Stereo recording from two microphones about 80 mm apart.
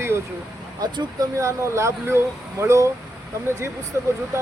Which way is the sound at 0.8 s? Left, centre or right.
Right.